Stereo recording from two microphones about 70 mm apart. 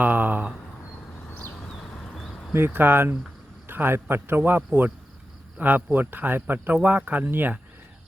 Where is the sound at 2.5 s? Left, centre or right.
Right.